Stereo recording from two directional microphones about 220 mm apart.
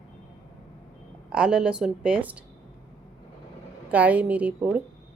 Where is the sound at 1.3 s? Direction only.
5° right (ahead or behind).